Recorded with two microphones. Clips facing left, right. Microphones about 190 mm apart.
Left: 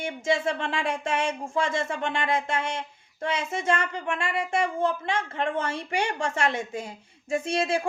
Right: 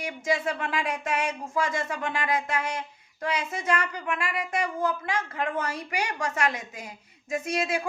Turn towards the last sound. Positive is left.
turn(degrees=30)  # may be behind; listen again after turning